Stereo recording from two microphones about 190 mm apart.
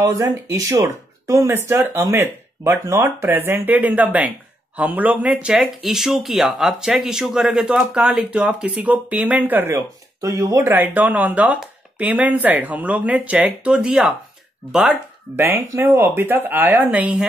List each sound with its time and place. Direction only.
0.0 s speech: 15° right (ahead or behind)